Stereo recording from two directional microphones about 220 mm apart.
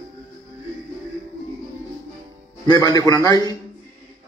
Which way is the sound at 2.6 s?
20° left (ahead or behind).